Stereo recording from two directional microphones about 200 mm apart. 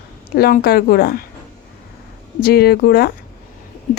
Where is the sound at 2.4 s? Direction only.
50° left (ahead or behind).